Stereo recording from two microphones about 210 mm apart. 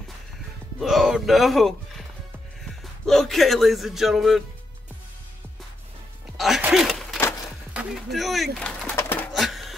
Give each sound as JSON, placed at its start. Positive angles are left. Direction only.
{"t": 0.7, "sound": "a man's voice", "side_deg": 0}
{"t": 6.3, "sound": "a sound", "side_deg": 0}
{"t": 7.7, "sound": "speech", "side_deg": 0}
{"t": 8.5, "sound": "pigeon", "side_deg": 5}